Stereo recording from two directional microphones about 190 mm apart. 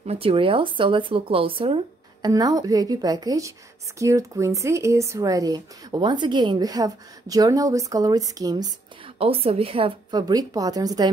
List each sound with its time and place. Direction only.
0.0 s speech: 30° right (ahead or behind)